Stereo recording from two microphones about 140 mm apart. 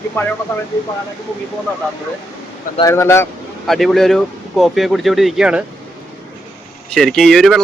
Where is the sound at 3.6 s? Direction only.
Centre (ahead or behind).